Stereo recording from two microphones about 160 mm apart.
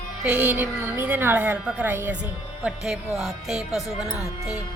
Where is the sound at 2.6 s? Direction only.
Centre (ahead or behind).